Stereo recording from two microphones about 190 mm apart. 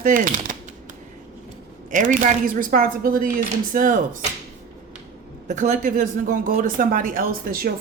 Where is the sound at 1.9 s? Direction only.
40° right (ahead or behind).